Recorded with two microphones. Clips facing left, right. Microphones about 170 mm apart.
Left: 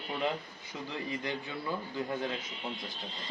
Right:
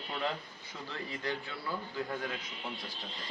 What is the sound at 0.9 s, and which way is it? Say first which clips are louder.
Speech: left 1 dB; 15° left (ahead or behind).